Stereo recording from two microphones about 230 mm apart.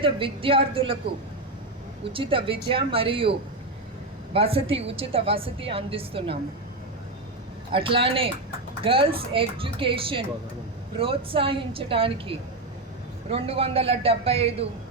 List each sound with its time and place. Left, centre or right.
0.0 s a woman's voice: right
2.1 s a woman's voice: right
4.4 s a woman's voice: right
7.7 s a woman's voice: right